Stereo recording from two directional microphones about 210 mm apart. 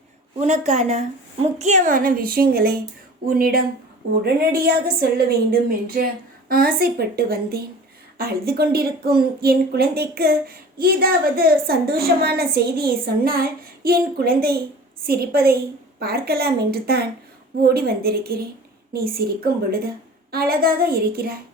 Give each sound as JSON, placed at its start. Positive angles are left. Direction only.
{"t": 0.3, "sound": "a woman's voice", "side_deg": -35}
{"t": 20.3, "sound": "speech", "side_deg": -45}